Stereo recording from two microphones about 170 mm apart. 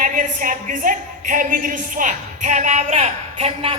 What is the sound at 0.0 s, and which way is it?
A woman's voice, 50° right (ahead or behind).